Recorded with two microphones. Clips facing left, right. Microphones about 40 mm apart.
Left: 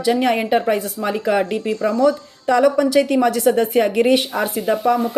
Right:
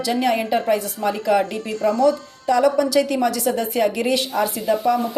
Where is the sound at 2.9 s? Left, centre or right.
Left.